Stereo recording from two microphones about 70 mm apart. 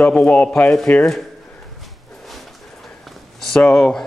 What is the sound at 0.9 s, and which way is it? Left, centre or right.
Speech, left.